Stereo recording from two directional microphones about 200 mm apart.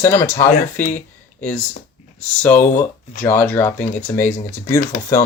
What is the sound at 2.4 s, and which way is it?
Speech, 10° left (ahead or behind).